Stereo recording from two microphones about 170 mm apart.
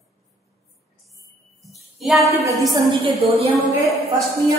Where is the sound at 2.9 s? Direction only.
30° right (ahead or behind).